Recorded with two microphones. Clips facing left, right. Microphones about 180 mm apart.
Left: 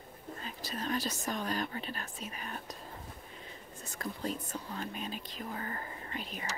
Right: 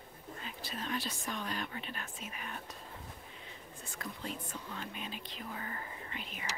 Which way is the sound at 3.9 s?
40° left (ahead or behind).